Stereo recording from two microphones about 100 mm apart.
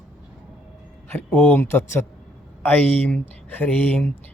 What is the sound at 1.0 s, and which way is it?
Speech, 20° left (ahead or behind).